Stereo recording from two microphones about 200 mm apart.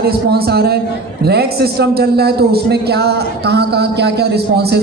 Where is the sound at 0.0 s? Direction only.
50° right (ahead or behind).